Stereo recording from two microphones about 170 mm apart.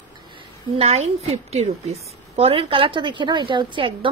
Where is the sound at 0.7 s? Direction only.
35° right (ahead or behind).